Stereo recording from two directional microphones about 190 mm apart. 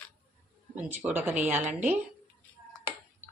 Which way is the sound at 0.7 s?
10° right (ahead or behind).